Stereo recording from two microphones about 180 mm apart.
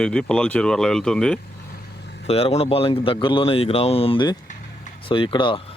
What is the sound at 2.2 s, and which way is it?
Speech, 35° left (ahead or behind).